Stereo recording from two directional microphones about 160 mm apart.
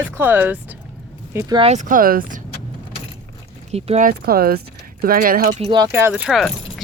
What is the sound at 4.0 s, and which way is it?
Speech, 65° right (ahead or behind).